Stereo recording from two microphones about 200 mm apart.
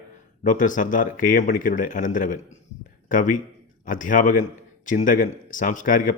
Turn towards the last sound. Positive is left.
turn(degrees=40)  # may be behind; listen again after turning